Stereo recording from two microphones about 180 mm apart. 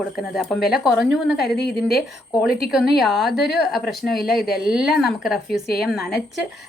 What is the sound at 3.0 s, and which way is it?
Speech, centre (ahead or behind).